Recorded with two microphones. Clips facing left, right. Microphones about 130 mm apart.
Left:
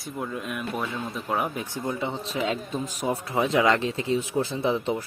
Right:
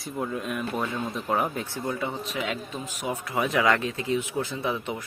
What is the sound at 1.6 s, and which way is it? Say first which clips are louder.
Speech: left 1 dB; 20° left (ahead or behind).